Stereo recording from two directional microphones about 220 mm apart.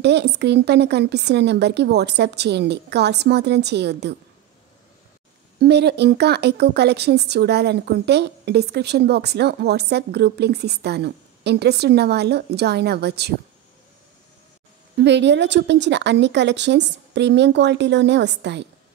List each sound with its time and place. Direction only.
0.0 s a woman's voice: 50° right (ahead or behind)
5.6 s a woman's voice: 50° right (ahead or behind)
15.0 s a woman's voice: 50° right (ahead or behind)